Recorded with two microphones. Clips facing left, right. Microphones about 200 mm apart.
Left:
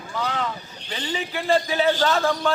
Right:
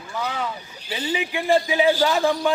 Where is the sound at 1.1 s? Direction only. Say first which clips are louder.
Right 2 dB; 15° right (ahead or behind).